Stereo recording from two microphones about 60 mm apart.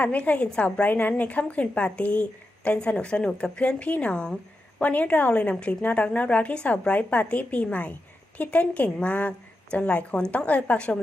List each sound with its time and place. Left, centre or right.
0.0 s a woman's voice: left